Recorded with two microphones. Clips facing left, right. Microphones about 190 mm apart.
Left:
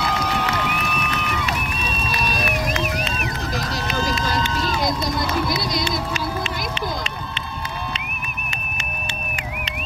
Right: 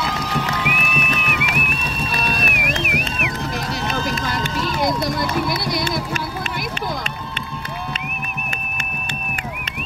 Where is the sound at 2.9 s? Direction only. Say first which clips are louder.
Right 2 dB; 60° right (ahead or behind).